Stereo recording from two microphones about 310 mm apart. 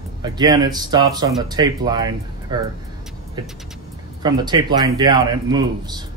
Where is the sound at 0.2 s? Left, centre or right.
Centre.